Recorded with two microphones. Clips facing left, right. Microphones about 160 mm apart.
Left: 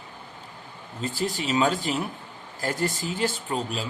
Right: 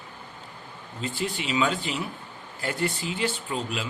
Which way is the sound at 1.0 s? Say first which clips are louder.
Left 2 dB; 40° left (ahead or behind).